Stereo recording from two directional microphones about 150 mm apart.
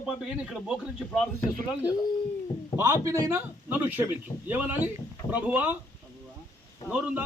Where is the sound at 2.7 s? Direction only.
20° right (ahead or behind).